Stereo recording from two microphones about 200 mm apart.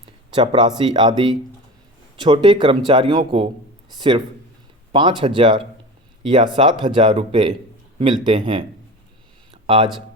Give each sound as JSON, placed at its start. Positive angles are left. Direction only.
{"t": 0.3, "sound": "speech", "side_deg": -25}
{"t": 4.9, "sound": "speech", "side_deg": -25}
{"t": 9.5, "sound": "a sound", "side_deg": -25}